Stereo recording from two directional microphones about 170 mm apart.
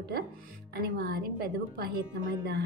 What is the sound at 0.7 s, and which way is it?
A woman's voice, 65° right (ahead or behind).